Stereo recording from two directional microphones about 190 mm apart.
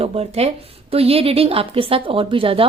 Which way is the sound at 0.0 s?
30° right (ahead or behind).